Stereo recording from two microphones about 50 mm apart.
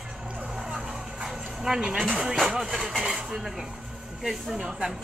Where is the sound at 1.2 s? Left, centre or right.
Centre.